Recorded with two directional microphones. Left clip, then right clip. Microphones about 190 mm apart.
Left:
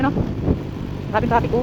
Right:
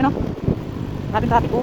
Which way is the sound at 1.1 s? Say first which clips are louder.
Even; 5° right (ahead or behind).